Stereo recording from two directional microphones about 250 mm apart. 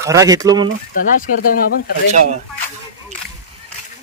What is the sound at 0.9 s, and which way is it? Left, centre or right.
Speech, left.